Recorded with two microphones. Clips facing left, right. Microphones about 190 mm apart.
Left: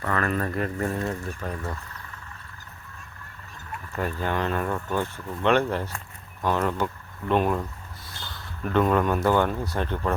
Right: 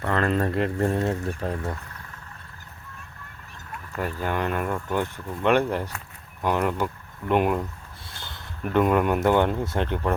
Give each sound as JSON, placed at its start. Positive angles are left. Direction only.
{"t": 0.0, "sound": "speech", "side_deg": -25}
{"t": 3.7, "sound": "speech", "side_deg": -5}
{"t": 8.6, "sound": "speech", "side_deg": -10}